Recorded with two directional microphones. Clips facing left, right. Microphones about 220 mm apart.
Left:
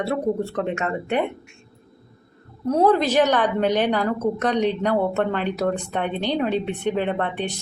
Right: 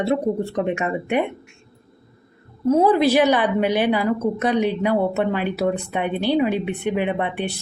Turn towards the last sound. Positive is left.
turn(degrees=-10)  # may be behind; listen again after turning